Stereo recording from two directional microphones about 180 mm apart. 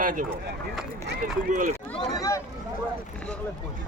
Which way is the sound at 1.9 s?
Centre (ahead or behind).